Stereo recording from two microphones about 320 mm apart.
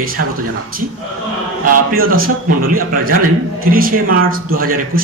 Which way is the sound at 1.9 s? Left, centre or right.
Right.